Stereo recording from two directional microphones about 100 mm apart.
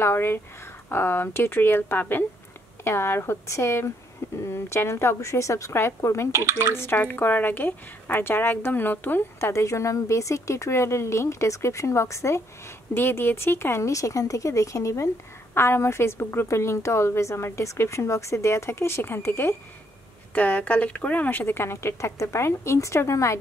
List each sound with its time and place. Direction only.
0.0 s speech: 25° left (ahead or behind)
6.3 s a woman's voice: 25° right (ahead or behind)
6.7 s speech: 25° left (ahead or behind)